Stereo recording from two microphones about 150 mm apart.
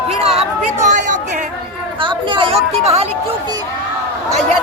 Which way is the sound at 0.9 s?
55° right (ahead or behind).